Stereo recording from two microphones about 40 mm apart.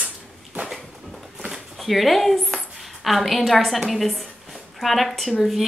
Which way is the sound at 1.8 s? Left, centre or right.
Centre.